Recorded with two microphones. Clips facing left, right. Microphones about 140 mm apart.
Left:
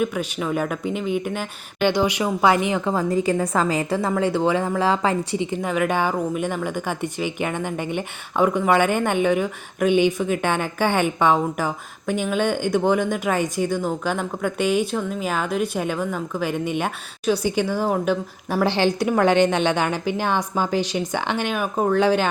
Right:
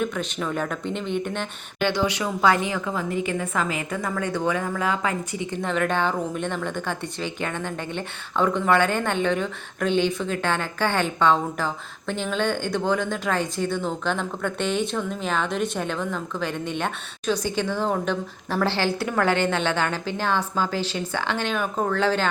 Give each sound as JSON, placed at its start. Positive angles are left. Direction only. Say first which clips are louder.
{"t": 0.0, "sound": "a woman's voice", "louder": "left 3 dB", "side_deg": 10}
{"t": 2.8, "sound": "a woman's voice", "louder": "left 6 dB", "side_deg": 40}
{"t": 5.5, "sound": "a woman's voice", "louder": "right 1 dB", "side_deg": 10}